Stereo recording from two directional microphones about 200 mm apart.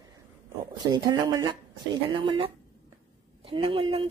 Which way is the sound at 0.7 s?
20° right (ahead or behind).